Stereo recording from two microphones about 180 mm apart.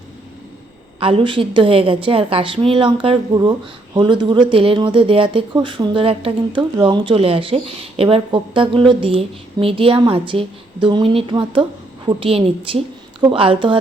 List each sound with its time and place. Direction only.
0.9 s speech: 30° right (ahead or behind)